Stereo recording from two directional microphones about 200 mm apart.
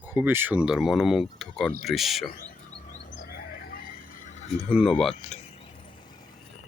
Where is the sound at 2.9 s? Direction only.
45° left (ahead or behind).